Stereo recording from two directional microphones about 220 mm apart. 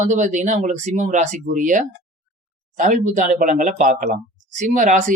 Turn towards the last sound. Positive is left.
turn(degrees=-35)  # may be behind; listen again after turning